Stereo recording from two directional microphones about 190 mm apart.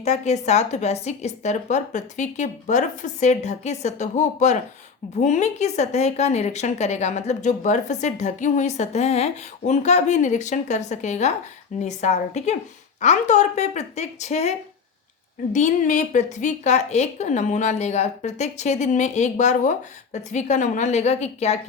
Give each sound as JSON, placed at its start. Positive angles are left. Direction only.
{"t": 0.0, "sound": "a woman's voice", "side_deg": 35}
{"t": 15.5, "sound": "a woman's voice", "side_deg": 40}